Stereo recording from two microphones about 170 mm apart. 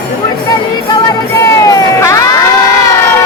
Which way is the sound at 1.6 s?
20° left (ahead or behind).